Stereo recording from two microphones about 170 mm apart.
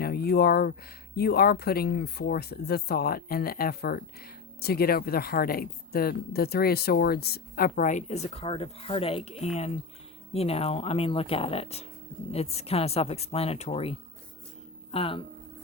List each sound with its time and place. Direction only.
0.0 s a sound: 65° left (ahead or behind)
1.1 s speech: 70° left (ahead or behind); by 13.9 s 35° left (ahead or behind)
14.9 s speech: 30° left (ahead or behind)